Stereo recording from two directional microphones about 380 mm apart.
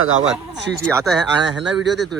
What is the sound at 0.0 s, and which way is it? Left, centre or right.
Speech, right.